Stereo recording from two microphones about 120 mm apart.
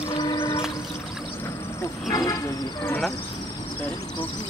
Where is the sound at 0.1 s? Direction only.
30° left (ahead or behind).